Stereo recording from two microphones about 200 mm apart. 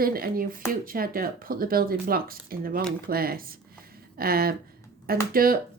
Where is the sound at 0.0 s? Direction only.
45° right (ahead or behind).